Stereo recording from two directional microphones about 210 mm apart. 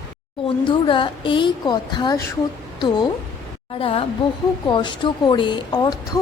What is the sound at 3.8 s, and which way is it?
Speech, 25° left (ahead or behind).